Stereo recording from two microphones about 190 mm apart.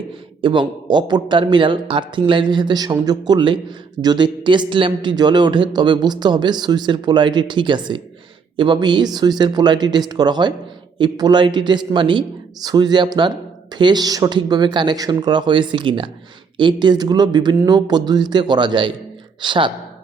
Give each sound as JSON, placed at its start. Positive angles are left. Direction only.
{"t": 0.4, "sound": "a man's voice", "side_deg": -25}